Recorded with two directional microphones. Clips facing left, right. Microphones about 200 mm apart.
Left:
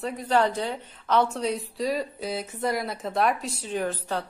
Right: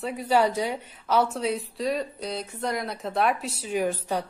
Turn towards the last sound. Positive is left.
turn(degrees=-10)  # may be behind; listen again after turning